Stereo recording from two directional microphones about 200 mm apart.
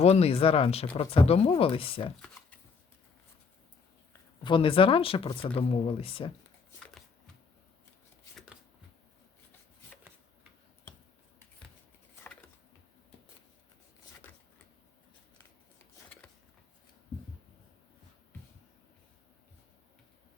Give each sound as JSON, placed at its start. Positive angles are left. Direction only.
{"t": 0.0, "sound": "speech", "side_deg": 30}
{"t": 4.4, "sound": "speech", "side_deg": 25}